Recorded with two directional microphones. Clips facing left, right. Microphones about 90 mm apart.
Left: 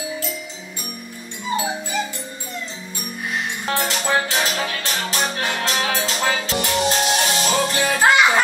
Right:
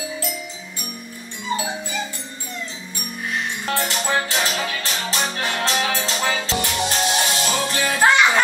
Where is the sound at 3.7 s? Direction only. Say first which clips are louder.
Left 2 dB; 20° left (ahead or behind).